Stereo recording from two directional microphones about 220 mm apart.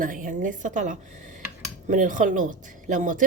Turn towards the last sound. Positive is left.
turn(degrees=-35)  # may be behind; listen again after turning